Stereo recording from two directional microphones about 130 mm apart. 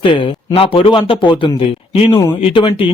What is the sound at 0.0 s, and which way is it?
A man's voice, 40° left (ahead or behind).